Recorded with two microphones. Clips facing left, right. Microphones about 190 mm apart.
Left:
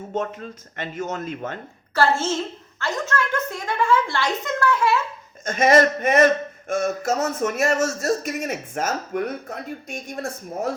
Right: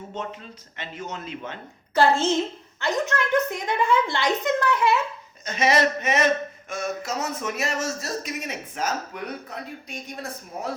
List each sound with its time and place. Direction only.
0.1 s speech: 45° left (ahead or behind)
2.0 s a woman's voice: 15° right (ahead or behind)
5.5 s speech: 50° left (ahead or behind)